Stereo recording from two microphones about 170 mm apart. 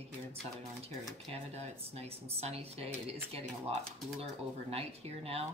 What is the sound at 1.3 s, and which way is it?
Speech, 35° right (ahead or behind).